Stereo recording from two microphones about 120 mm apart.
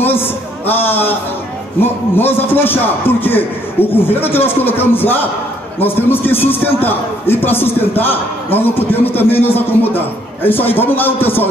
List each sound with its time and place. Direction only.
0.0 s a man's voice: 15° left (ahead or behind)